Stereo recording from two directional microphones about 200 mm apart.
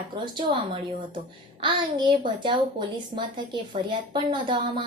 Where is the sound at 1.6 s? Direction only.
25° right (ahead or behind).